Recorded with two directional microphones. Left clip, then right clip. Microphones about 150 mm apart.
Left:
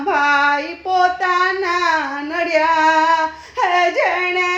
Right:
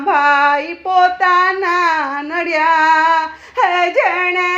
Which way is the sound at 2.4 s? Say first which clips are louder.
Right 2 dB; 20° right (ahead or behind).